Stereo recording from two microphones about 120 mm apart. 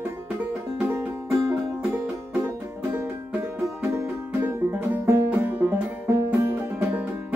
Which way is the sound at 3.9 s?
20° right (ahead or behind).